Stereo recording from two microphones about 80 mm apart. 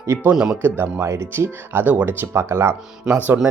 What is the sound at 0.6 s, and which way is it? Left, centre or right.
Speech, right.